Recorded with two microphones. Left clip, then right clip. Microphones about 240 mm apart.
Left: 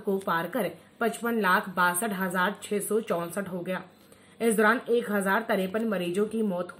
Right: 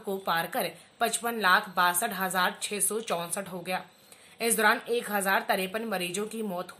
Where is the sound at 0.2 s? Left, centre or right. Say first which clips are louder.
Left 1 dB; right.